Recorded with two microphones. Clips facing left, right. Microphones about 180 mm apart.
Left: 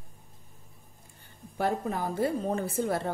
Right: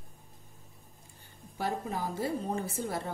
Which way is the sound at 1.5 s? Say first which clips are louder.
Left 4 dB; 55° left (ahead or behind).